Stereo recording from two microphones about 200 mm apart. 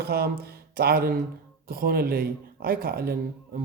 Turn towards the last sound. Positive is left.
turn(degrees=-50)  # may be behind; listen again after turning